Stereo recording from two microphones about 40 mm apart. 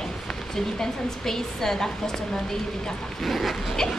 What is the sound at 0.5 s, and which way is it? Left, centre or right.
A woman's voice, centre.